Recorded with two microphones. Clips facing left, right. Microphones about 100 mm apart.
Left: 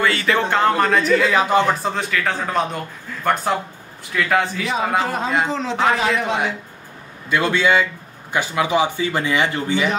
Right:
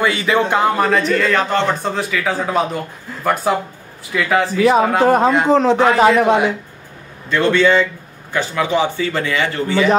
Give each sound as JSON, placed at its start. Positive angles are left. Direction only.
{"t": 0.0, "sound": "a man's voice", "side_deg": -15}
{"t": 1.9, "sound": "a man's voice", "side_deg": 0}
{"t": 5.0, "sound": "a man's voice", "side_deg": -55}
{"t": 7.2, "sound": "speech", "side_deg": 10}